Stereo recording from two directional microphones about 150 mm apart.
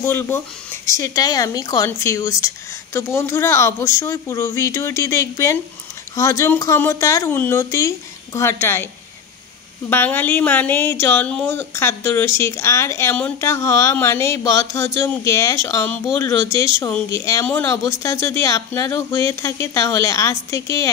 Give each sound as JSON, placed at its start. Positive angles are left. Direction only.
{"t": 0.0, "sound": "speech", "side_deg": 15}
{"t": 9.8, "sound": "speech", "side_deg": 15}